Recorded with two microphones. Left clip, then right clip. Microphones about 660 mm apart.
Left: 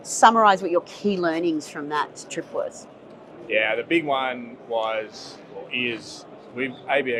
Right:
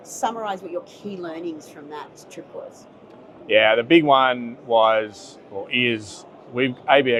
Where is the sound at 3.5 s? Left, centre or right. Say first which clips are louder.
Right 6 dB; right.